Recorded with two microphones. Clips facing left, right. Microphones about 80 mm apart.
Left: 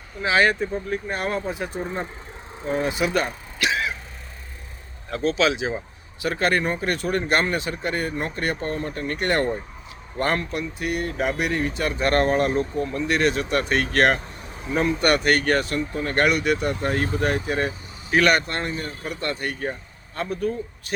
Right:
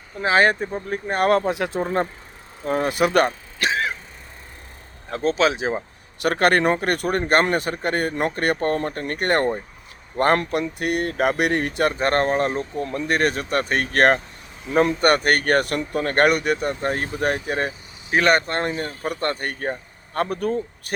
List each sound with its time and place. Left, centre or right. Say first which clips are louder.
0.2 s speech: right 2 dB; right
1.2 s speech: right 8 dB; right
2.6 s speech: right 3 dB; right
3.6 s throat clearing: right 1 dB; right
5.1 s speech: right 1 dB; right
6.2 s speech: right 5 dB; right
7.2 s speech: right 5 dB; right
12.8 s speech: right 3 dB; right
20.1 s speech: right 3 dB; right